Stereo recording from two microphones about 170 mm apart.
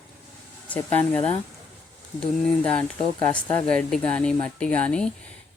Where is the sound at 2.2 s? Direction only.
5° left (ahead or behind).